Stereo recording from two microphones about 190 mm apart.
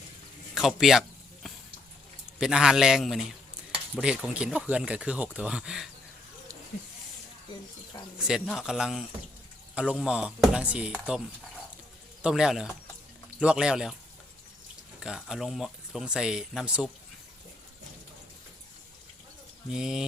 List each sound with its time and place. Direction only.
0.5 s a sound: centre (ahead or behind)
2.4 s speech: 5° right (ahead or behind)
8.2 s speech: 5° right (ahead or behind)
12.2 s speech: 5° right (ahead or behind)
15.0 s speech: 5° right (ahead or behind)
19.7 s speech: 5° right (ahead or behind)